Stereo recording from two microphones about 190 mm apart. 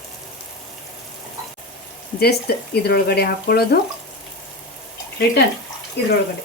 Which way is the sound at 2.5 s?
55° left (ahead or behind).